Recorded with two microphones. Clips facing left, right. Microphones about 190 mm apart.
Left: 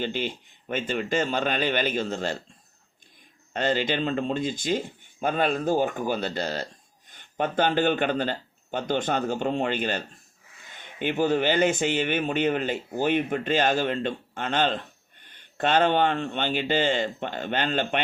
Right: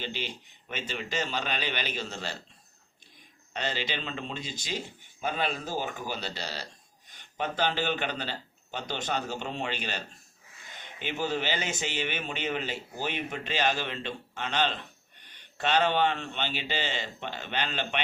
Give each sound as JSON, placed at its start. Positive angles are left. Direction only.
{"t": 0.0, "sound": "speech", "side_deg": 50}
{"t": 3.5, "sound": "speech", "side_deg": 50}
{"t": 11.0, "sound": "speech", "side_deg": 55}